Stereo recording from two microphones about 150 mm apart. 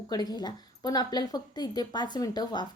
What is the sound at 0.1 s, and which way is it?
A woman's voice, 25° left (ahead or behind).